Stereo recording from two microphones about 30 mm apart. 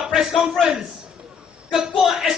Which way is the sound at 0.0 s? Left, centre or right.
Centre.